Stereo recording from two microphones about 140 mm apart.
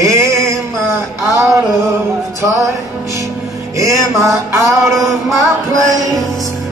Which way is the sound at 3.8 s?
25° right (ahead or behind).